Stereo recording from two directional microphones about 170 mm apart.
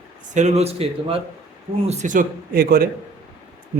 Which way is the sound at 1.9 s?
45° right (ahead or behind).